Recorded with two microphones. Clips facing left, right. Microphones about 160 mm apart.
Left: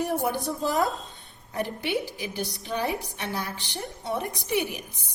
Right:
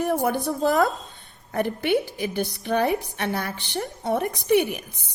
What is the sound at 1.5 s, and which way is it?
A woman's voice, 55° right (ahead or behind).